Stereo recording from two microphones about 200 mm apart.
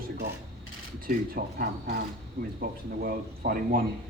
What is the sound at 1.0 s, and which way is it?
Speech, 45° right (ahead or behind).